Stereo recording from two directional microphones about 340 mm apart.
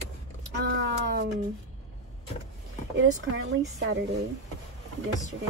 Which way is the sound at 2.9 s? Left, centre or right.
Right.